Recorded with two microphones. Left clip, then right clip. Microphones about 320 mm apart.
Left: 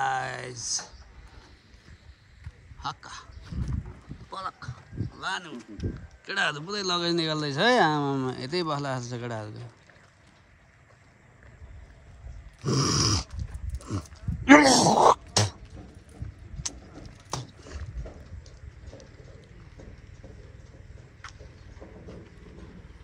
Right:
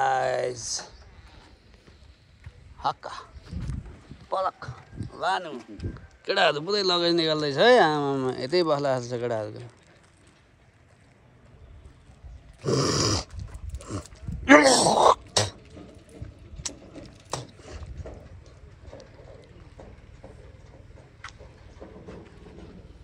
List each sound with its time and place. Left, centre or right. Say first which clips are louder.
0.0 s a sound: right 5 dB; centre
2.8 s speech: right 7 dB; centre
4.3 s speech: right 9 dB; centre
12.6 s dog: right 2 dB; centre
16.6 s gears: right 1 dB; centre